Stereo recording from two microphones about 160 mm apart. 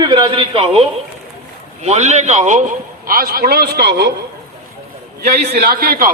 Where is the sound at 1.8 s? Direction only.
45° right (ahead or behind); by 4.1 s 90° right.